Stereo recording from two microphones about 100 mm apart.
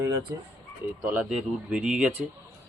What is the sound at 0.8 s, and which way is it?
Speech, 20° right (ahead or behind).